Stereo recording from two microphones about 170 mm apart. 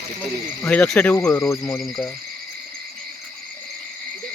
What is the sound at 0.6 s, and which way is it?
Speech, 10° left (ahead or behind).